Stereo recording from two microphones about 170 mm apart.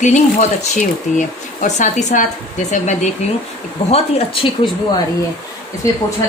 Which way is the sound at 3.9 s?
30° left (ahead or behind).